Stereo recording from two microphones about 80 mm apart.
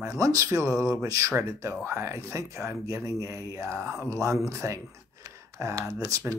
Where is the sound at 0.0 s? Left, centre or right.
Right.